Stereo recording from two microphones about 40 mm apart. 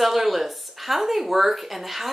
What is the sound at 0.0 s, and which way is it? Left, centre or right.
A woman's voice, centre.